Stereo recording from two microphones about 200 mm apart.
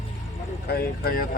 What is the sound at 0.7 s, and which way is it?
Vehicle, 50° left (ahead or behind).